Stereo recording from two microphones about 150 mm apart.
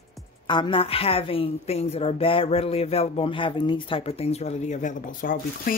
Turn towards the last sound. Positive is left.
turn(degrees=65)  # may be behind; listen again after turning